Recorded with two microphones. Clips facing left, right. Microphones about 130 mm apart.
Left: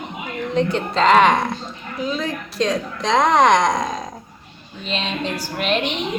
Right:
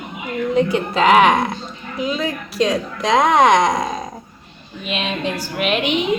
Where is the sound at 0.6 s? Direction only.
10° right (ahead or behind).